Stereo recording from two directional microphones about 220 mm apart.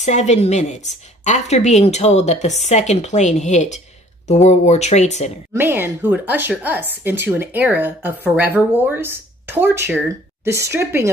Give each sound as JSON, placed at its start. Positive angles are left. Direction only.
{"t": 0.0, "sound": "a woman's voice", "side_deg": 30}
{"t": 5.5, "sound": "a woman's voice", "side_deg": -10}